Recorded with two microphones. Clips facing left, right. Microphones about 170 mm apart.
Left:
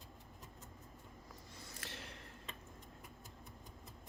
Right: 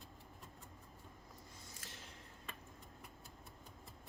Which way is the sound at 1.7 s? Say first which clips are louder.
Left 8 dB; 70° left (ahead or behind).